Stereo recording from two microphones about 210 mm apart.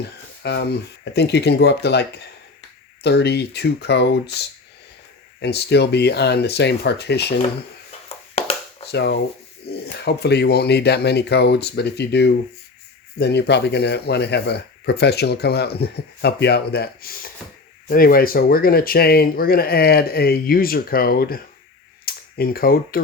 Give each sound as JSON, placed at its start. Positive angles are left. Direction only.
{"t": 0.0, "sound": "speech", "side_deg": 50}
{"t": 5.4, "sound": "speech", "side_deg": 50}
{"t": 8.4, "sound": "a sound", "side_deg": 30}
{"t": 8.9, "sound": "speech", "side_deg": 50}